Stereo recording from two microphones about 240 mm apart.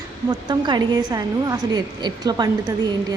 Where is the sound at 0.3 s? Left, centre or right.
Centre.